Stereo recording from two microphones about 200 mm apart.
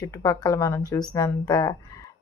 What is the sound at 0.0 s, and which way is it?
Speech, 15° left (ahead or behind).